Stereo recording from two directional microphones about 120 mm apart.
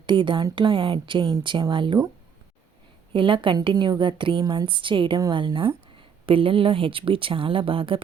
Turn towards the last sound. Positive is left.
turn(degrees=-50)  # may be behind; listen again after turning